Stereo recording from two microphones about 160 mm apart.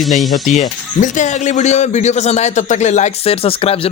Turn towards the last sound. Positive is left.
turn(degrees=35)  # may be behind; listen again after turning